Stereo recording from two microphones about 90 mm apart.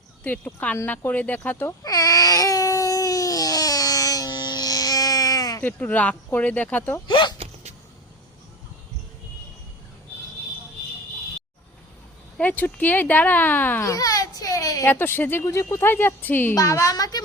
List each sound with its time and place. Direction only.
0.3 s speech: 15° left (ahead or behind)
1.8 s baby cry: 45° left (ahead or behind)
5.6 s speech: 20° left (ahead or behind)
7.1 s speech: 60° left (ahead or behind)
12.4 s speech: 20° left (ahead or behind)
13.8 s baby cry: 40° left (ahead or behind)
14.8 s speech: 25° left (ahead or behind)
16.6 s a woman's voice: 35° left (ahead or behind)